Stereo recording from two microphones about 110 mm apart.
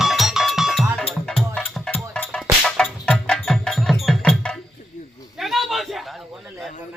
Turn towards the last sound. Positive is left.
turn(degrees=0)  # may be behind; listen again after turning